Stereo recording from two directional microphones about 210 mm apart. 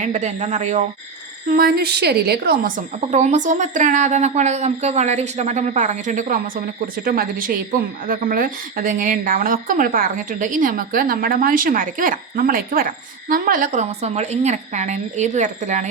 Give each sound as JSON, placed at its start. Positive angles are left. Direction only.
{"t": 0.0, "sound": "a woman's voice", "side_deg": -30}
{"t": 1.5, "sound": "a woman's voice", "side_deg": -45}